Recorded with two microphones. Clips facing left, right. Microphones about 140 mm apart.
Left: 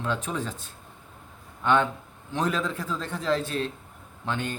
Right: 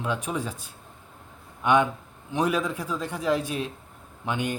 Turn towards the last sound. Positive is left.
turn(degrees=-15)  # may be behind; listen again after turning